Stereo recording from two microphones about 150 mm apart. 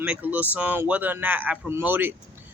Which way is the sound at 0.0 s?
10° right (ahead or behind).